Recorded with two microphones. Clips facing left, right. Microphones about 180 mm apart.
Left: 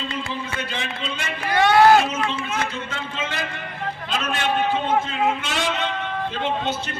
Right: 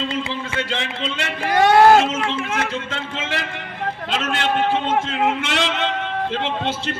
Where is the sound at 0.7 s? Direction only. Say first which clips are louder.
Right 4 dB; 80° right.